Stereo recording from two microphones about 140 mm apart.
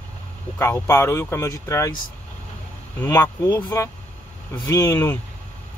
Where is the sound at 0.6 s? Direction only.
20° left (ahead or behind).